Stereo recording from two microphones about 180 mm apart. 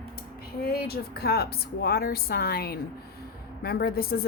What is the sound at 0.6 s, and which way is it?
A woman's voice, 60° left (ahead or behind).